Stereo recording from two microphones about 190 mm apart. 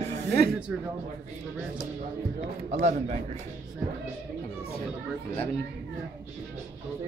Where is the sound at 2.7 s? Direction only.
40° right (ahead or behind).